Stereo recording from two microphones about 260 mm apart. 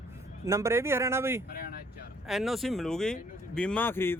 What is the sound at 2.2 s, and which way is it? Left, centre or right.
Speech, centre.